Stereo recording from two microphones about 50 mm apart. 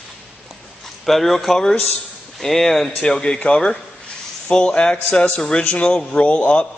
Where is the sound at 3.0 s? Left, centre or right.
Centre.